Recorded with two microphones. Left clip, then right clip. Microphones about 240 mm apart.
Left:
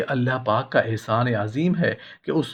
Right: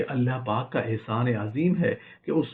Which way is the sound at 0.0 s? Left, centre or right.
Left.